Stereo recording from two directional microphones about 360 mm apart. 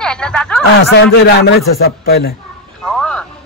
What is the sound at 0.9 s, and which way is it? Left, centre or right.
A man's voice, left.